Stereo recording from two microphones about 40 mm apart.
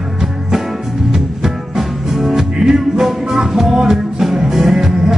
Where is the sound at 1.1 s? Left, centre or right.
Centre.